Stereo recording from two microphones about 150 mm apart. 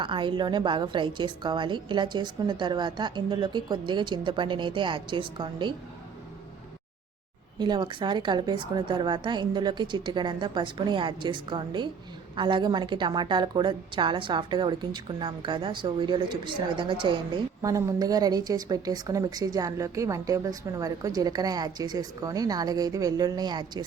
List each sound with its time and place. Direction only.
0.0 s a woman's voice: 35° right (ahead or behind)
7.6 s a woman's voice: 30° right (ahead or behind)
17.6 s a woman's voice: 20° right (ahead or behind)